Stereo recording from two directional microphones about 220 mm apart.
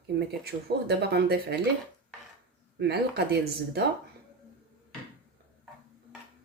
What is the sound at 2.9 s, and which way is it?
Speech, 45° right (ahead or behind).